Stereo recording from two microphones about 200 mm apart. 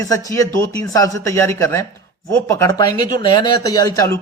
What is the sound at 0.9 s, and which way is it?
Speech, 15° left (ahead or behind).